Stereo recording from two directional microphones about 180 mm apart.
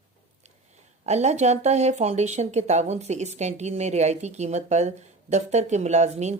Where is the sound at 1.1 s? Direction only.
40° right (ahead or behind).